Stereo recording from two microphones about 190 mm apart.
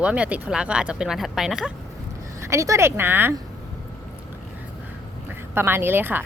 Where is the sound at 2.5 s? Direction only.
15° right (ahead or behind).